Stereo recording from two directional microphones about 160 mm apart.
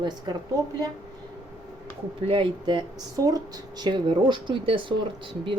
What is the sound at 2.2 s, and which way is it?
A woman's voice, 35° right (ahead or behind).